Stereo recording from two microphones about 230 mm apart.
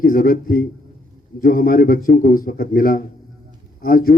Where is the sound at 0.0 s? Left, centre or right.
Left.